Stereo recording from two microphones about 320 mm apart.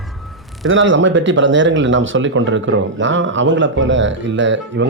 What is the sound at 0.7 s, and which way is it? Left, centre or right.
Speech, right.